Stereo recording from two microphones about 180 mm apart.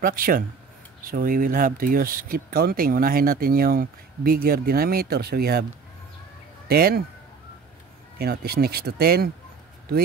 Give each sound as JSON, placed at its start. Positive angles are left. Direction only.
{"t": 0.0, "sound": "speech", "side_deg": -50}
{"t": 6.7, "sound": "speech", "side_deg": -55}
{"t": 8.2, "sound": "speech", "side_deg": -60}